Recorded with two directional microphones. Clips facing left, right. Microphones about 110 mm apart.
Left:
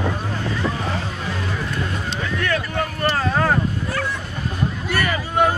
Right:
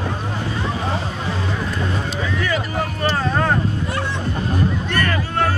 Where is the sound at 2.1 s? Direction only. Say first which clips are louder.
Left 2 dB; 5° right (ahead or behind).